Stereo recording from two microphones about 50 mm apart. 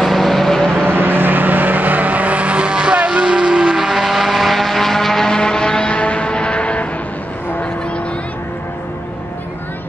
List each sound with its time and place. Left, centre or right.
0.0 s vehicle: centre
0.8 s vehicle: right; by 3.7 s centre
3.7 s vehicle: centre; by 6.9 s left